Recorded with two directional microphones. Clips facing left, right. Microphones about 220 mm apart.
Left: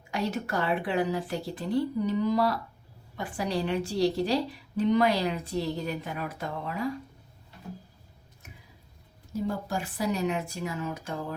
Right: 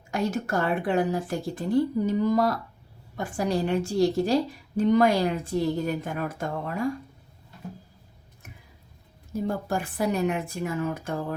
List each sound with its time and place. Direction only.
0.1 s a woman's voice: 45° right (ahead or behind)
9.3 s speech: 55° right (ahead or behind)